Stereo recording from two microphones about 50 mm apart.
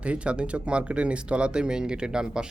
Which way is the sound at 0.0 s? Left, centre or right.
Right.